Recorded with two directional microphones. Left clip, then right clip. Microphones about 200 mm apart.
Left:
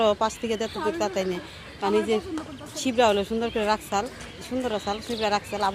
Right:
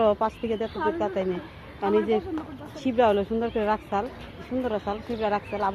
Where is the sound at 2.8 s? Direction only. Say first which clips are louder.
Even; 10° left (ahead or behind).